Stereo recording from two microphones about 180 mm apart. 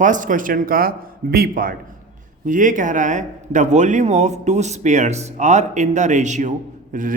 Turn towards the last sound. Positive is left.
turn(degrees=-45)  # may be behind; listen again after turning